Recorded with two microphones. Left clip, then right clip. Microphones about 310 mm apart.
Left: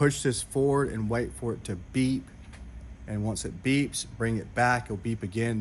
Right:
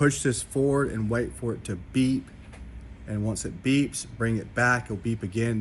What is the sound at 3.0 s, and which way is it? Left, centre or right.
Speech, left.